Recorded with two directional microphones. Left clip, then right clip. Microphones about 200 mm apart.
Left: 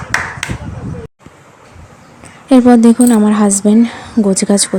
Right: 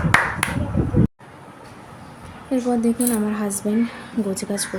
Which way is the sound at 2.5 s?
45° left (ahead or behind).